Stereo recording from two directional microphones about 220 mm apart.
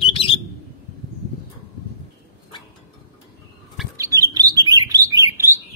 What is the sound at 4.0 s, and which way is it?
Chirp, 15° right (ahead or behind).